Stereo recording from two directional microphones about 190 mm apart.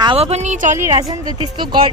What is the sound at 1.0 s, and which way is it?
Speech, 20° right (ahead or behind).